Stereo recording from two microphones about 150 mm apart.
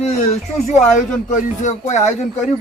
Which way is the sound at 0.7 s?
55° left (ahead or behind).